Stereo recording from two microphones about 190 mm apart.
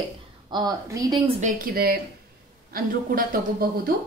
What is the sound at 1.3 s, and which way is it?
A woman's voice, 45° right (ahead or behind).